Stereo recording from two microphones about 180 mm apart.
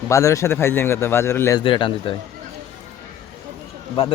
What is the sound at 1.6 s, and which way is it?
Speech, 30° left (ahead or behind).